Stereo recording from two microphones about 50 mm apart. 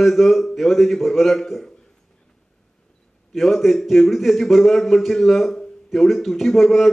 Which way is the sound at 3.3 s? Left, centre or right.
Centre.